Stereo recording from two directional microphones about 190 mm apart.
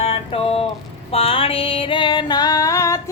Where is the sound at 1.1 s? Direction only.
30° left (ahead or behind).